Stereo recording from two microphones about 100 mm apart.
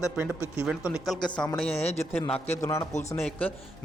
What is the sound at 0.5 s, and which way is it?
Speech, 10° right (ahead or behind).